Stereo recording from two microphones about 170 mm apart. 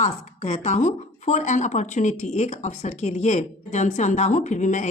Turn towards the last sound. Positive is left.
turn(degrees=45)  # may be behind; listen again after turning